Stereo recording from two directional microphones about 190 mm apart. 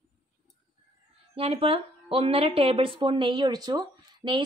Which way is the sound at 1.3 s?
30° right (ahead or behind).